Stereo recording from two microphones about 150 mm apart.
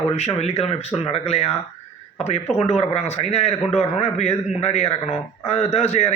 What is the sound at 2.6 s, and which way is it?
A man's voice, 45° left (ahead or behind).